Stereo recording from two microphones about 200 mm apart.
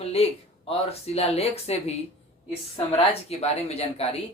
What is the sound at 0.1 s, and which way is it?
A woman's voice, 30° left (ahead or behind).